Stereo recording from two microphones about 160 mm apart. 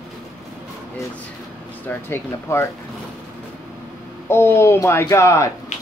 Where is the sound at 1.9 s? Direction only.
15° left (ahead or behind).